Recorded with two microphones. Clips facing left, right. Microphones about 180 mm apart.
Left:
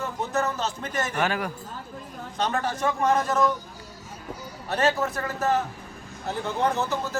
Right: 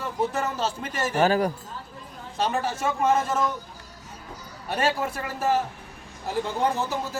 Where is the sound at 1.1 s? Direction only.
35° right (ahead or behind).